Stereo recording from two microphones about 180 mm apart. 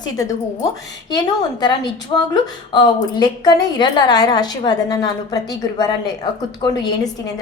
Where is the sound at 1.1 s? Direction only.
25° left (ahead or behind).